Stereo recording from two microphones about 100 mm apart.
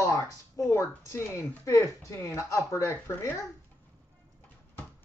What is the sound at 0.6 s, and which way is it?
Speech, 30° left (ahead or behind).